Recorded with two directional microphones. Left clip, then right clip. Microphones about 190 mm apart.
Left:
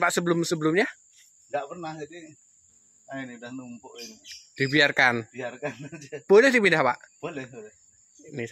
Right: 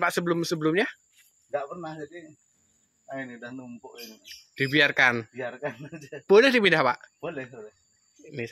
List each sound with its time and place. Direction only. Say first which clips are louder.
0.0 s speech: left 2 dB; 15° left (ahead or behind)
1.5 s speech: even; 10° right (ahead or behind)
3.1 s speech: right 1 dB; 10° right (ahead or behind)
4.3 s speech: left 1 dB; 15° left (ahead or behind)
5.3 s speech: even; 10° right (ahead or behind)
6.2 s speech: left 1 dB; 10° left (ahead or behind)
7.2 s speech: right 1 dB; 10° right (ahead or behind)
8.2 s a sound: left 1 dB; 10° left (ahead or behind)